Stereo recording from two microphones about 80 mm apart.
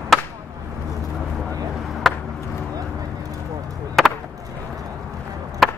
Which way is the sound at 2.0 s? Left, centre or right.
Centre.